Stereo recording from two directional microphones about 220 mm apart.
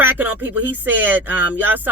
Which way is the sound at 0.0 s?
10° right (ahead or behind).